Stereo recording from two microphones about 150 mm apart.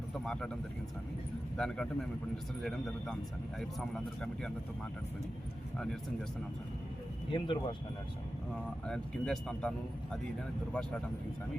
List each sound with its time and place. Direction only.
0.1 s speech: 5° left (ahead or behind)
1.5 s speech: 5° left (ahead or behind)
5.7 s speech: 5° left (ahead or behind)
7.3 s speech: 35° left (ahead or behind)
8.9 s speech: 5° left (ahead or behind)